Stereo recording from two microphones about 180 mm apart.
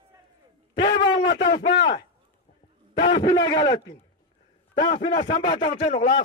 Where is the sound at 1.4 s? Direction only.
25° left (ahead or behind).